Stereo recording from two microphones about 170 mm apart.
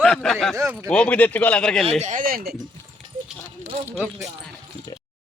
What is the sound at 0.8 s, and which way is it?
Speech, 5° left (ahead or behind).